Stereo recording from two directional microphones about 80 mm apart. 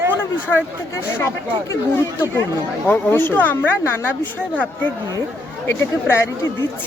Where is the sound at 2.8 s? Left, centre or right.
Left.